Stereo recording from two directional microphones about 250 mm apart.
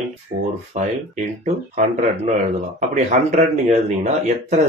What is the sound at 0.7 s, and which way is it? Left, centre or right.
Speech, right.